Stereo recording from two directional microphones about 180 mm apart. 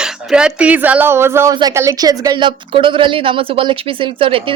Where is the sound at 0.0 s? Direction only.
5° right (ahead or behind).